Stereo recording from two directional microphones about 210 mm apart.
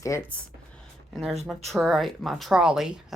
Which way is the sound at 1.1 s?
Centre (ahead or behind).